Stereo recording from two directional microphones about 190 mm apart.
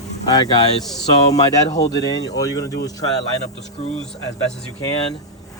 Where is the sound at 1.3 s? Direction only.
20° left (ahead or behind).